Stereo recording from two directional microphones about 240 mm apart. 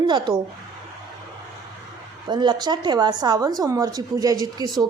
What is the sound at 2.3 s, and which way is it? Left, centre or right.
A woman's voice, centre.